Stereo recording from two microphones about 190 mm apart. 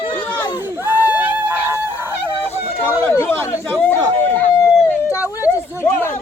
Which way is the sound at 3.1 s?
10° left (ahead or behind).